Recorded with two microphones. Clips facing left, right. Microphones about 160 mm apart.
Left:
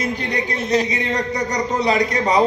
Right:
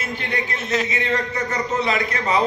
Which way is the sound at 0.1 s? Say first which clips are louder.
Left 3 dB; 40° left (ahead or behind).